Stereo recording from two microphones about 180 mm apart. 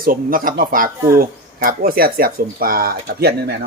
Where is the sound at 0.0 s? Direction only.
50° right (ahead or behind).